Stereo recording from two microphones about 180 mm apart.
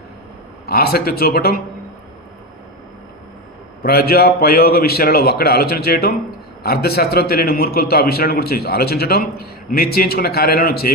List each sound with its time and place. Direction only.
0.7 s a man's voice: 60° left (ahead or behind)
3.8 s a man's voice: 60° left (ahead or behind)